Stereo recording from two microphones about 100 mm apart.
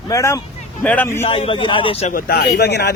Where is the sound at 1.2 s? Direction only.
70° left (ahead or behind).